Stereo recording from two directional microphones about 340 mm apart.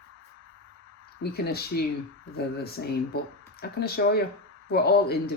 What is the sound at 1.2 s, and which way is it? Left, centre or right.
Speech, left.